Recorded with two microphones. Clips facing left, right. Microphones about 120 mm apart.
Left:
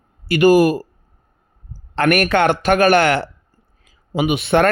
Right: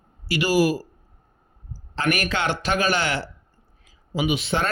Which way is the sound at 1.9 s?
60° left (ahead or behind).